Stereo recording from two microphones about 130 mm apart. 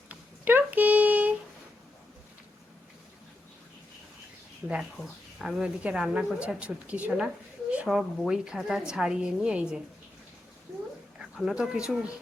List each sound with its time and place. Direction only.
0.1 s a sound: 15° right (ahead or behind)
4.6 s a woman's voice: 15° right (ahead or behind)
5.4 s a woman's voice: 5° right (ahead or behind)
11.3 s speech: 5° right (ahead or behind)